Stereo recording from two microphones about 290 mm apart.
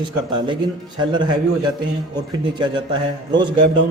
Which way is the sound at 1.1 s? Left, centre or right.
Centre.